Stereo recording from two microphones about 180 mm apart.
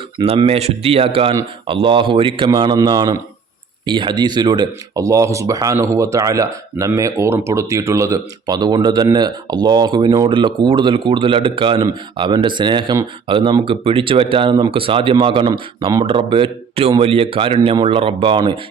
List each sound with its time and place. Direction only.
0.2 s speech: 30° right (ahead or behind)